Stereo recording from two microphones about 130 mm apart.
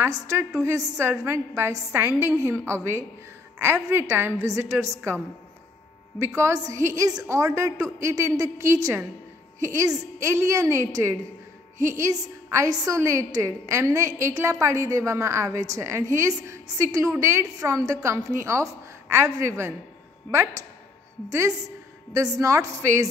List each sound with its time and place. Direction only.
0.0 s a woman's voice: 20° right (ahead or behind)